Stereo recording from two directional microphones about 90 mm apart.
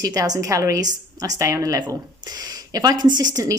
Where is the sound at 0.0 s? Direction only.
40° right (ahead or behind).